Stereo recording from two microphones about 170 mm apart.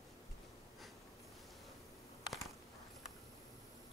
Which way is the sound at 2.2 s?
Centre (ahead or behind).